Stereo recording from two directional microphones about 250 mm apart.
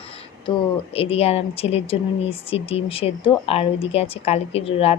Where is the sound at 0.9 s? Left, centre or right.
Left.